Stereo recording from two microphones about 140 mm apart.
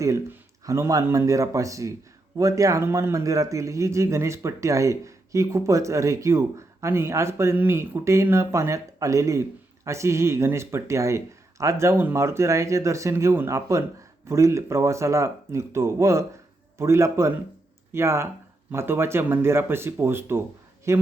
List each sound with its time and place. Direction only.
0.0 s speech: 20° right (ahead or behind)